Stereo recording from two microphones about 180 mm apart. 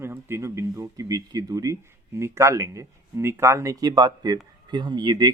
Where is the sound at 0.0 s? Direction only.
15° right (ahead or behind).